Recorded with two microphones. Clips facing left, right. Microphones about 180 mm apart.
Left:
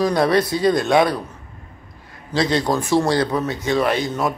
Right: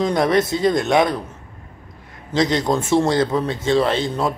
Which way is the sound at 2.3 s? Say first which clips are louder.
Right 1 dB; 20° right (ahead or behind).